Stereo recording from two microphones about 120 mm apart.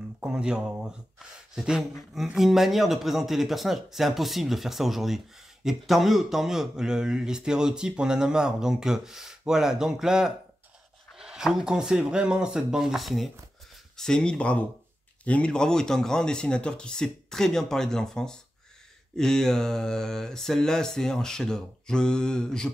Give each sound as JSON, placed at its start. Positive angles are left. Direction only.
{"t": 0.2, "sound": "speech", "side_deg": -5}
{"t": 1.5, "sound": "a sound", "side_deg": -5}
{"t": 2.1, "sound": "speech", "side_deg": 0}